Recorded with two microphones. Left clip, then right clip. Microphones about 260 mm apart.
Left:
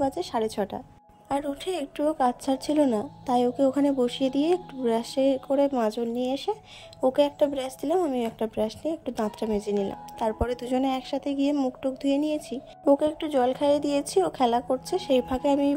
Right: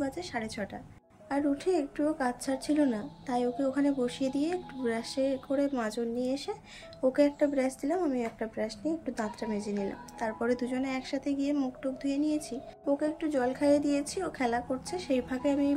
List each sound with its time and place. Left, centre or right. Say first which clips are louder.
0.0 s speech: left 8 dB; left